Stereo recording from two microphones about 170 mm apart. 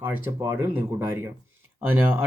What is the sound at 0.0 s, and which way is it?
Speech, 15° right (ahead or behind).